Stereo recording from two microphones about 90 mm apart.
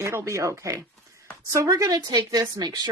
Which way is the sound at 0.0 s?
30° right (ahead or behind).